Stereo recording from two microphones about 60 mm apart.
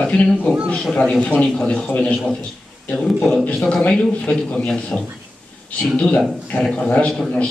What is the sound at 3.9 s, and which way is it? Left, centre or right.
Speech, centre.